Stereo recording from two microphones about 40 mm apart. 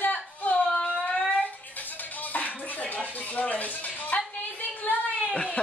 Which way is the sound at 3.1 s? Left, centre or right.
Left.